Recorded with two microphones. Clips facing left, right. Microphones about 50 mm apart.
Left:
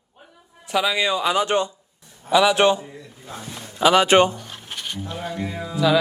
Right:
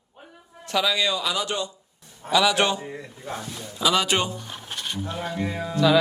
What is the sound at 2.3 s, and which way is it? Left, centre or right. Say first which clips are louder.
Speech: left 4 dB; centre.